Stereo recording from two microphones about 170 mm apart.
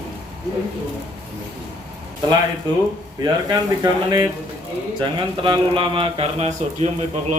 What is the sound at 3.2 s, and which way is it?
Speech, 20° right (ahead or behind).